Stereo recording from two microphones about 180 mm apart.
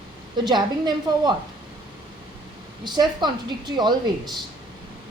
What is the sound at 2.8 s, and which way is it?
A woman's voice, 25° right (ahead or behind).